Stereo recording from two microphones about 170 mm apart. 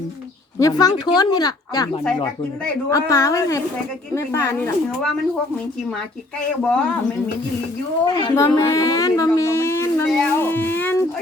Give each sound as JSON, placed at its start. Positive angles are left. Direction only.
{"t": 0.6, "sound": "speech", "side_deg": 20}
{"t": 6.6, "sound": "speech", "side_deg": 5}
{"t": 8.0, "sound": "speech", "side_deg": 25}
{"t": 10.1, "sound": "a sound", "side_deg": 10}